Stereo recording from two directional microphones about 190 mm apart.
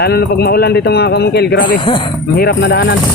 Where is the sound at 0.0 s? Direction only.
55° left (ahead or behind).